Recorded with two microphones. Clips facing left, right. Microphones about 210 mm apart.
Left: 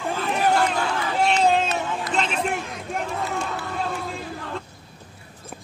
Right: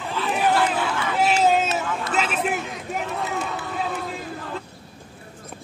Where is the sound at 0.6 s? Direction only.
5° right (ahead or behind).